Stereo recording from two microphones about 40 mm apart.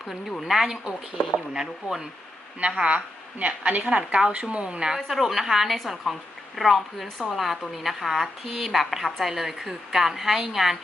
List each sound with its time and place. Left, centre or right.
0.1 s a woman's voice: centre
2.6 s a woman's voice: right
3.8 s a woman's voice: right
5.0 s a woman's voice: centre